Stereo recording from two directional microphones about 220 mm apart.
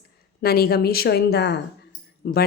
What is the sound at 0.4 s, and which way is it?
Speech, 45° left (ahead or behind).